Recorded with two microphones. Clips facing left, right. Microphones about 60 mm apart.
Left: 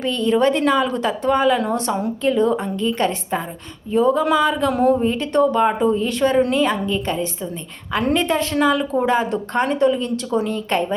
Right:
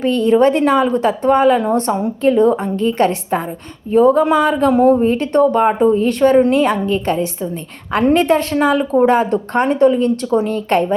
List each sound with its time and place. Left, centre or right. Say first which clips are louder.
0.0 s speech: right 5 dB; right
8.5 s speech: right 4 dB; right